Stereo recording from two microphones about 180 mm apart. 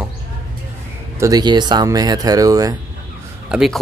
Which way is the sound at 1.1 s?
20° right (ahead or behind).